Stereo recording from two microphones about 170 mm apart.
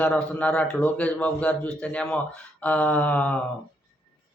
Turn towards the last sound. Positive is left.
turn(degrees=10)  # may be behind; listen again after turning